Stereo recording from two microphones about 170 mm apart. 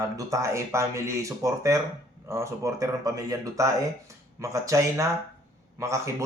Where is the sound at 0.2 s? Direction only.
20° right (ahead or behind).